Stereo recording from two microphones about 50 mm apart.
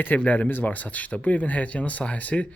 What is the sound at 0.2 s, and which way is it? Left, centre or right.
Speech, left.